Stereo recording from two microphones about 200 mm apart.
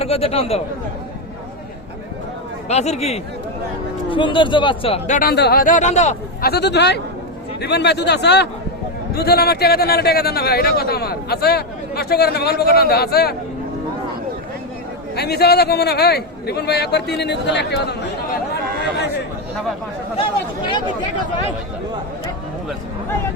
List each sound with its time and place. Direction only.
0.0 s speech: 30° left (ahead or behind)
2.6 s speech: 35° left (ahead or behind)
5.3 s speech: 50° left (ahead or behind); by 6.1 s 35° left (ahead or behind)
6.4 s a man's voice: 55° left (ahead or behind)
15.1 s a man's voice: 55° left (ahead or behind)
20.1 s speech: 25° left (ahead or behind)